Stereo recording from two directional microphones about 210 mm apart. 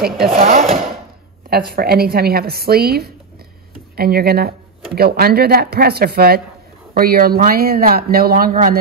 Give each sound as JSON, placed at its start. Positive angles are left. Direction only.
{"t": 0.4, "sound": "speech", "side_deg": -35}
{"t": 1.7, "sound": "speech", "side_deg": -50}